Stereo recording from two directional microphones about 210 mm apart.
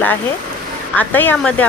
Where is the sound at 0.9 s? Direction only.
10° left (ahead or behind).